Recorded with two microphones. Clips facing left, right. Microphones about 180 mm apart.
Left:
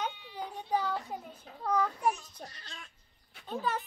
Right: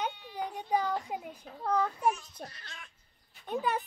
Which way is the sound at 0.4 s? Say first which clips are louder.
Right 2 dB; 10° right (ahead or behind).